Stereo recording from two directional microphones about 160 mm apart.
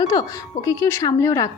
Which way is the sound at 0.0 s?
25° left (ahead or behind).